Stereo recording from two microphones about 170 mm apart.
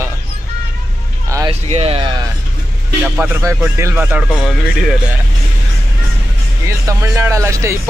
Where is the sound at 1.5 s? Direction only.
35° right (ahead or behind).